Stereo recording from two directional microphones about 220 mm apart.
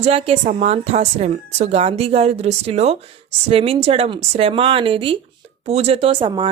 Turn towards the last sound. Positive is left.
turn(degrees=-20)  # may be behind; listen again after turning